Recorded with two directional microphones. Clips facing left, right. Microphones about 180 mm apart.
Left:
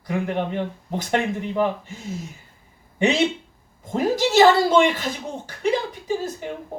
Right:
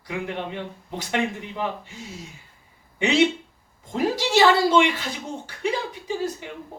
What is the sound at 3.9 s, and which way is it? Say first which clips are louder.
Speech: left 3 dB; 45° left (ahead or behind).